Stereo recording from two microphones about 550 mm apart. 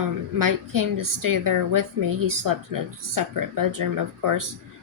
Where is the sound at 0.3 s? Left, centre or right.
Right.